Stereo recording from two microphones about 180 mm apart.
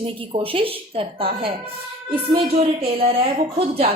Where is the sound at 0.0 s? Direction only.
30° right (ahead or behind).